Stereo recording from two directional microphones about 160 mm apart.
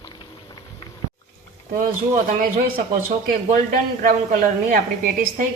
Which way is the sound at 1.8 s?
65° right (ahead or behind).